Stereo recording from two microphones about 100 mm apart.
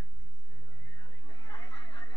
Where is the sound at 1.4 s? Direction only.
20° left (ahead or behind).